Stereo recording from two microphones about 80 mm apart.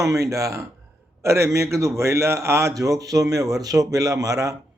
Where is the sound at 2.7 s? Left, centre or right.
Right.